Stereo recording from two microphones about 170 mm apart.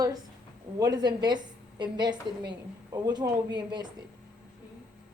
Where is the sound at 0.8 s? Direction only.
25° right (ahead or behind).